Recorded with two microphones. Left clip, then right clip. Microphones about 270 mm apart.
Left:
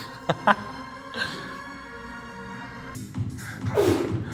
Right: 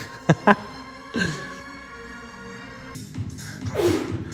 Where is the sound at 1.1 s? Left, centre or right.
Right.